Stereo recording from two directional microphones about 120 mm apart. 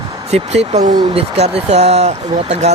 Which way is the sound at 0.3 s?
65° right (ahead or behind).